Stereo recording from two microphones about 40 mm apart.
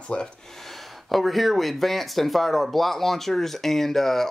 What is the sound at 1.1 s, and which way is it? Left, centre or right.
Speech, centre.